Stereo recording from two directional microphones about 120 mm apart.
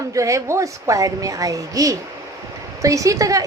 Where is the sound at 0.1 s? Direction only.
25° right (ahead or behind).